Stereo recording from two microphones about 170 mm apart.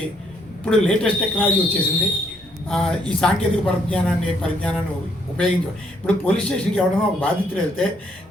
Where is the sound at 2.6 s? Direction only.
5° left (ahead or behind).